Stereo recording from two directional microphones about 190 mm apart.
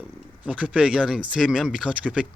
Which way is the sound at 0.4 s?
5° right (ahead or behind).